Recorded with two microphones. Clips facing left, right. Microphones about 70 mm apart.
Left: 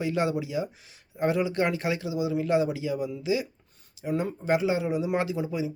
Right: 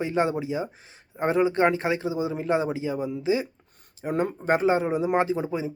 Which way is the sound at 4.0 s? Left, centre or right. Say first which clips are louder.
Right 3 dB; right.